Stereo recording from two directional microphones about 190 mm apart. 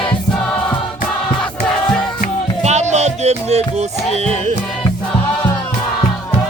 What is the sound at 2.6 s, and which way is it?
Music, 35° right (ahead or behind).